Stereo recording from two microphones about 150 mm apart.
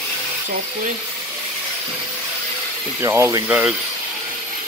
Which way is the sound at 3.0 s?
20° right (ahead or behind).